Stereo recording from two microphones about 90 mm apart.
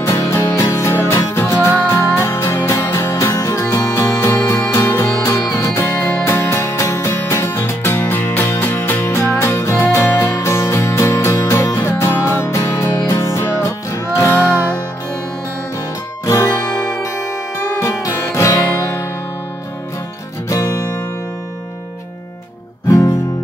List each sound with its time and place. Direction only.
0.0 s music: 35° left (ahead or behind)
16.3 s music: 35° left (ahead or behind)
17.7 s music: 35° left (ahead or behind)
20.4 s music: 35° left (ahead or behind)
22.8 s music: 35° left (ahead or behind)